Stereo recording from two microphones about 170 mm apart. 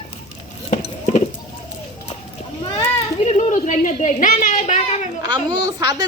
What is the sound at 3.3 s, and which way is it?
Speech, 45° left (ahead or behind).